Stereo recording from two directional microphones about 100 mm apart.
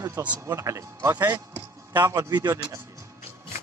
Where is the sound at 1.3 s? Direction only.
20° right (ahead or behind).